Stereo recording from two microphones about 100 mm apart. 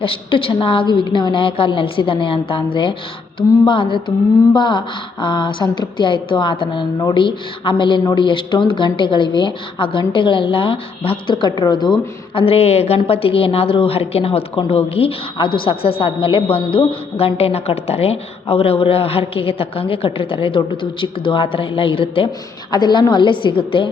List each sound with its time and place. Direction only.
0.0 s a woman's voice: 65° left (ahead or behind); by 11.9 s 45° left (ahead or behind)
12.3 s a woman's voice: 70° left (ahead or behind)
22.7 s speech: 45° left (ahead or behind)